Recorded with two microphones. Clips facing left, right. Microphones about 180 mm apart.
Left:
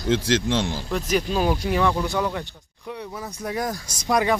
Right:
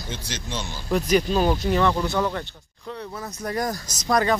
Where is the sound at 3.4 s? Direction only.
5° left (ahead or behind).